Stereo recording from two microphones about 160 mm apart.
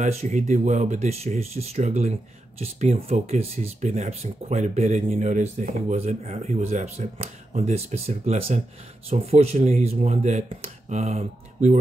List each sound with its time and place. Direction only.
0.0 s speech: 45° right (ahead or behind)